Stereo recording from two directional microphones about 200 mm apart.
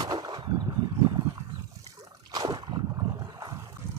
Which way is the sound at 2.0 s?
20° right (ahead or behind).